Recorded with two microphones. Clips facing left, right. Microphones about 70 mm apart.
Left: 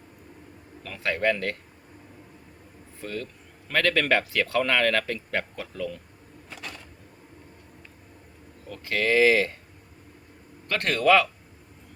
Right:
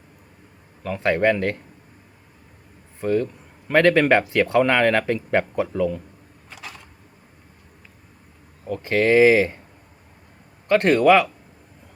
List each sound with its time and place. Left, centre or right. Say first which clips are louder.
0.8 s a man's voice: right 7 dB; centre
3.0 s speech: right 13 dB; right
6.5 s a sound: right 1 dB; centre
8.6 s speech: right 7 dB; right
10.7 s speech: right 6 dB; right